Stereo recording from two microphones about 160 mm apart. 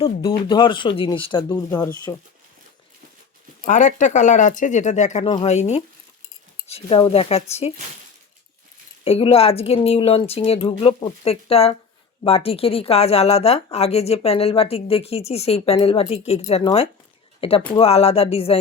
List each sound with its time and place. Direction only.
0.0 s a woman's voice: 35° left (ahead or behind)
3.6 s a woman's voice: 50° left (ahead or behind)
9.0 s a woman's voice: 35° left (ahead or behind)